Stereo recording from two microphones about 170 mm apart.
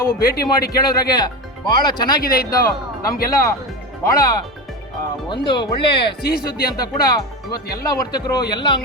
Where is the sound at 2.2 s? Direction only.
60° left (ahead or behind).